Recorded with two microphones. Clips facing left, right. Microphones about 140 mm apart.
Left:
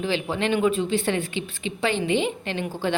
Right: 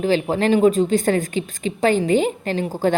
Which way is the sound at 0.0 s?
40° right (ahead or behind).